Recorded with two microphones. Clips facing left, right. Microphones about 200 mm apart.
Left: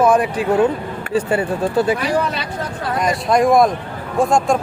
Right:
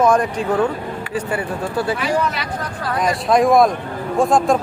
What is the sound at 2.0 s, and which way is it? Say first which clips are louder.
Speech: left 1 dB; 35° left (ahead or behind).